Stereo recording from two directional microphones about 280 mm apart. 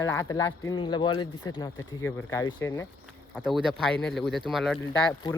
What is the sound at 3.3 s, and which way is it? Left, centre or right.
Speech, centre.